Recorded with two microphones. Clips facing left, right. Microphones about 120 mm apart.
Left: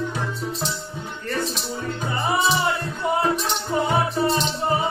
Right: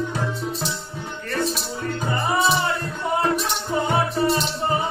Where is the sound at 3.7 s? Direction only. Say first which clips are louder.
Even; centre (ahead or behind).